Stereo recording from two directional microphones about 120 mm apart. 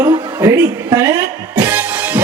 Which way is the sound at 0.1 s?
30° right (ahead or behind).